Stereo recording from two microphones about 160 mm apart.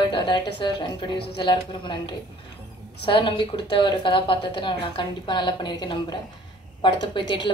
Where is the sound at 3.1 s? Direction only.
30° left (ahead or behind).